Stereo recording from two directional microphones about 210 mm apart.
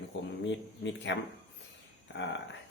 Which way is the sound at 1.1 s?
60° left (ahead or behind).